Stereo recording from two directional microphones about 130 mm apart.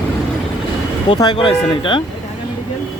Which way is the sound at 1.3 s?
40° left (ahead or behind).